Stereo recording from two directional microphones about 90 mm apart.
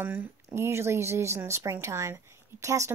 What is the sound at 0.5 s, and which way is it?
Speech, 30° right (ahead or behind).